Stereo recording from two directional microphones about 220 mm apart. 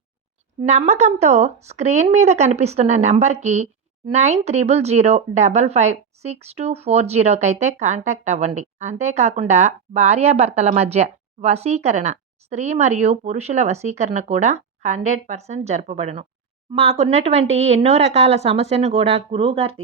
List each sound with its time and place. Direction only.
0.6 s a woman's voice: 30° right (ahead or behind)